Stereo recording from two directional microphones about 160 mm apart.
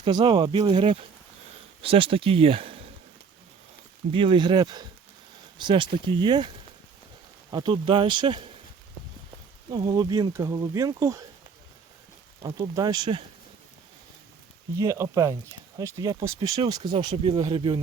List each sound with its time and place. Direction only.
0.0 s speech: 30° right (ahead or behind)
4.1 s speech: 30° right (ahead or behind)
7.5 s speech: 30° right (ahead or behind)
9.6 s speech: 30° right (ahead or behind)
12.4 s speech: 25° right (ahead or behind)
14.8 s speech: 20° right (ahead or behind)